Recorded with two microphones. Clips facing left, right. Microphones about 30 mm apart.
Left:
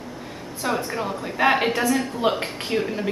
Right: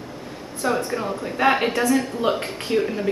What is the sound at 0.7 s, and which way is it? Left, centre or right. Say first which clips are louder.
A woman's voice: right 2 dB; centre.